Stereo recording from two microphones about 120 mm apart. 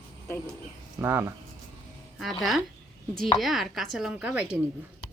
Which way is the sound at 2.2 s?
Centre (ahead or behind).